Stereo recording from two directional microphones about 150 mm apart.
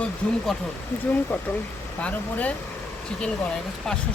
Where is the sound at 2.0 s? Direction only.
10° left (ahead or behind).